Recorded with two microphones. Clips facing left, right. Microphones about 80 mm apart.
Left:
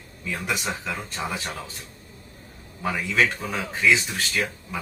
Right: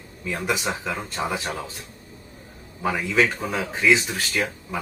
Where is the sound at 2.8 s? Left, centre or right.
Centre.